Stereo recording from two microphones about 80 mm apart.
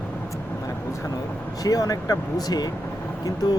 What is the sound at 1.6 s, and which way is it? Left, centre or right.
Speech, left.